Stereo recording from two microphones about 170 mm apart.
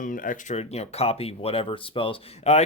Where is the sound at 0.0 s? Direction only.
50° left (ahead or behind).